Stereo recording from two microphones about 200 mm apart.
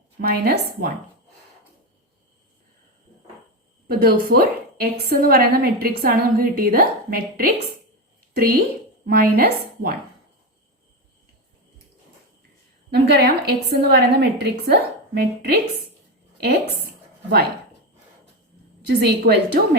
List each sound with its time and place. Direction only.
0.2 s a woman's voice: 50° right (ahead or behind)
3.8 s a woman's voice: 50° right (ahead or behind)
12.9 s a woman's voice: 55° right (ahead or behind)
18.9 s a woman's voice: 55° right (ahead or behind)